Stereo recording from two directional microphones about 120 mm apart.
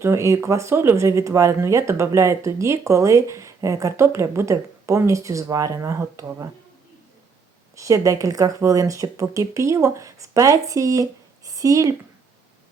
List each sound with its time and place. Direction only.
0.0 s speech: 25° right (ahead or behind)
7.8 s speech: 25° right (ahead or behind)